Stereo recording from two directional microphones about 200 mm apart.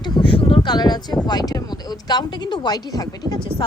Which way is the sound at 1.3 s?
20° left (ahead or behind).